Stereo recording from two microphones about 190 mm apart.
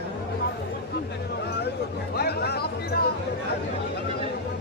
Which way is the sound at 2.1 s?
55° left (ahead or behind).